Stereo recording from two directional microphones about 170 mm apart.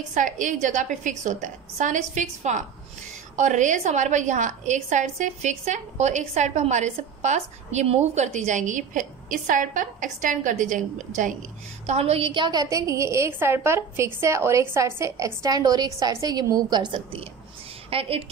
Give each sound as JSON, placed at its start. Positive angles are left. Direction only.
{"t": 0.1, "sound": "a woman's voice", "side_deg": -50}